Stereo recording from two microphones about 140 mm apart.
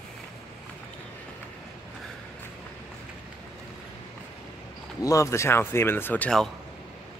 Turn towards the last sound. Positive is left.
turn(degrees=5)  # may be behind; listen again after turning